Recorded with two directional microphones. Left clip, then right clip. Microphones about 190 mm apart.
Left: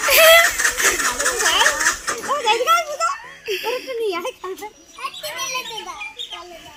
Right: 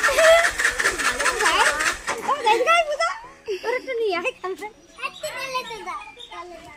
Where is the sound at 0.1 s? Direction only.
5° right (ahead or behind).